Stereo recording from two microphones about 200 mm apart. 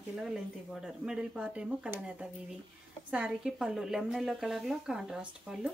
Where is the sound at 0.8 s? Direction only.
5° right (ahead or behind).